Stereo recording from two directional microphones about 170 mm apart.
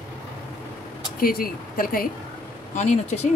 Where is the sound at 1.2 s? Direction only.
60° left (ahead or behind).